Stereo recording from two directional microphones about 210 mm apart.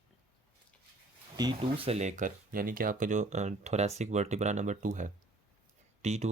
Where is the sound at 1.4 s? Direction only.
25° right (ahead or behind).